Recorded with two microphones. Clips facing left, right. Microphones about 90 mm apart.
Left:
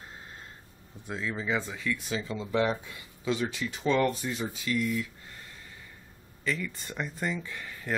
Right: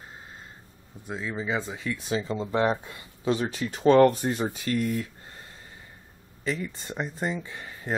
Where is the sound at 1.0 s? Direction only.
10° right (ahead or behind).